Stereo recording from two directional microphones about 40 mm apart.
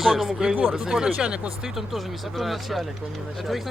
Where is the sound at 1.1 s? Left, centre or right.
Right.